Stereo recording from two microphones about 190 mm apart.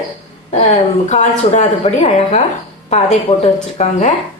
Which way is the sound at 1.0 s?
40° left (ahead or behind).